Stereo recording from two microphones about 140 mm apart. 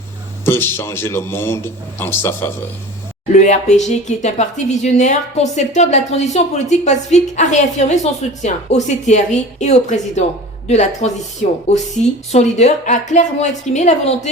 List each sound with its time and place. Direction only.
0.4 s speech: 15° left (ahead or behind)
3.3 s a woman's voice: 55° left (ahead or behind)